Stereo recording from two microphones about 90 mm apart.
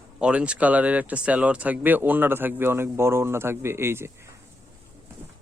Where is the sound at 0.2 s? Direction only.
10° right (ahead or behind); by 4.1 s 25° right (ahead or behind).